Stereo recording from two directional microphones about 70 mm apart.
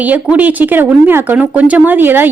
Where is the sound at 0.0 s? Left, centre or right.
Right.